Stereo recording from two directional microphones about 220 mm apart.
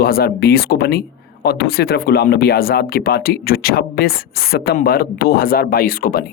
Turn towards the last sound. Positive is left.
turn(degrees=40)  # may be behind; listen again after turning